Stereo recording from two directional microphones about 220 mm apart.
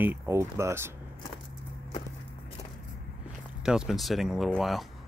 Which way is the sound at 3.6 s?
Centre (ahead or behind).